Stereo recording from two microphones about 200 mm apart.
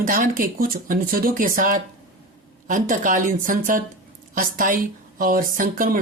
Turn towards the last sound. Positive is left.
turn(degrees=-45)  # may be behind; listen again after turning